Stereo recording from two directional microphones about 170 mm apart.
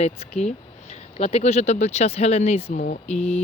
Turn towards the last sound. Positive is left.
turn(degrees=40)  # may be behind; listen again after turning